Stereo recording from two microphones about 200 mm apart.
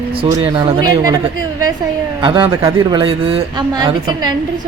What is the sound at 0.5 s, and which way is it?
Speech, 25° right (ahead or behind).